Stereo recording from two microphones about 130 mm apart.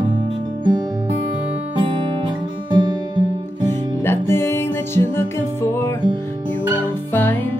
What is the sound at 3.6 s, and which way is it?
Music, 20° left (ahead or behind).